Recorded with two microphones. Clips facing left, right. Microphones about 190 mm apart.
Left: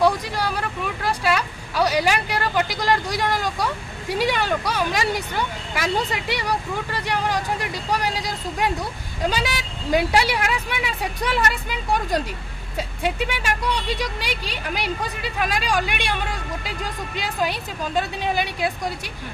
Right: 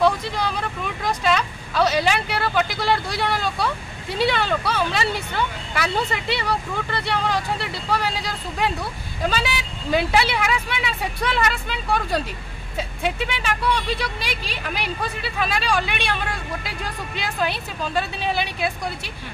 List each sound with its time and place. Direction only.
0.0 s speech: 10° left (ahead or behind)